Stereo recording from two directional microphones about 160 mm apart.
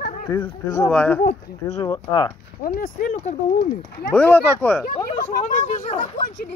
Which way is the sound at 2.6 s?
60° left (ahead or behind).